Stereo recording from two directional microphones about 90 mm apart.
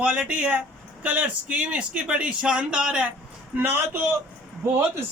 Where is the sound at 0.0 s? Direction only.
15° right (ahead or behind).